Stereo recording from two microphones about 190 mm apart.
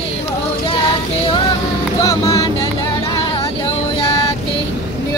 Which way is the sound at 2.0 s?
15° left (ahead or behind).